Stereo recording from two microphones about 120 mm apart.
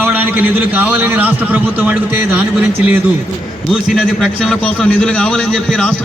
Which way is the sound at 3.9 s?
5° right (ahead or behind).